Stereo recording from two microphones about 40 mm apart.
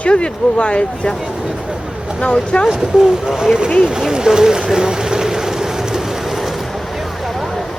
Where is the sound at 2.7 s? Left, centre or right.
Centre.